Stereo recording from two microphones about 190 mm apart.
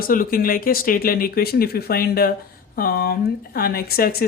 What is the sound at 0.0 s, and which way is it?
Speech, 50° left (ahead or behind).